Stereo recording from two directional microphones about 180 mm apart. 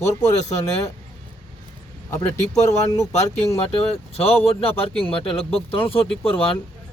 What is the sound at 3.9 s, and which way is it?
Speech, 35° left (ahead or behind).